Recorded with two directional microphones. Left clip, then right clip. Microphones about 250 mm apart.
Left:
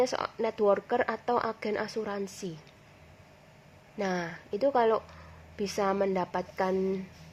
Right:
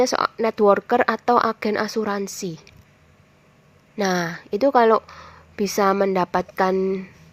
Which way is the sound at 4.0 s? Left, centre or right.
Centre.